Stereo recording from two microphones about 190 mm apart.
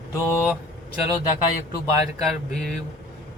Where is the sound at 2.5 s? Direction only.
Centre (ahead or behind).